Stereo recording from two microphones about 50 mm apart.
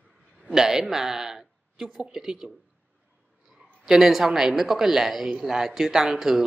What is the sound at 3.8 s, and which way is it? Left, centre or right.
Speech, centre.